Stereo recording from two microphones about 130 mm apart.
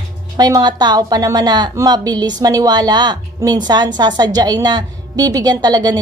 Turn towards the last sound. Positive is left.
turn(degrees=-30)  # may be behind; listen again after turning